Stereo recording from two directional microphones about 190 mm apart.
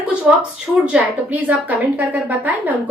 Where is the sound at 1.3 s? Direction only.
10° right (ahead or behind).